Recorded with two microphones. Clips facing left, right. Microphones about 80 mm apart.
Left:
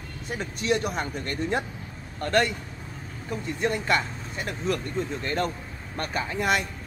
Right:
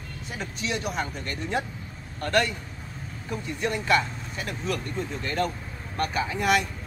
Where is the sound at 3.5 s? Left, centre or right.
Left.